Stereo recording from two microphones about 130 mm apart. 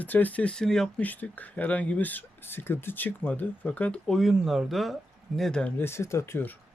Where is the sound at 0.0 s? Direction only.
10° left (ahead or behind).